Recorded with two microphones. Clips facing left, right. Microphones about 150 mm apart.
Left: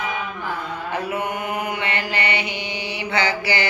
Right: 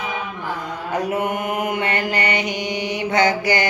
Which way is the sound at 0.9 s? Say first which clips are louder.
Right 4 dB; 45° right (ahead or behind).